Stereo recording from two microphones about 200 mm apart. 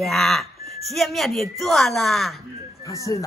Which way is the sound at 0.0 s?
Centre (ahead or behind).